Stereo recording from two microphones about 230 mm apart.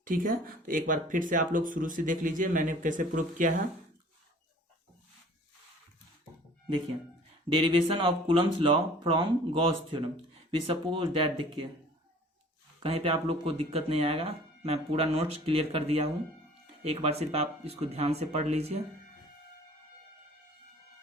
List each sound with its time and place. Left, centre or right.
0.0 s speech: right
7.5 s speech: right
12.8 s speech: right